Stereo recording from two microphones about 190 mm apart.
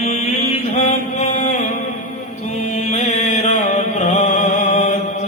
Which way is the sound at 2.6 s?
35° left (ahead or behind).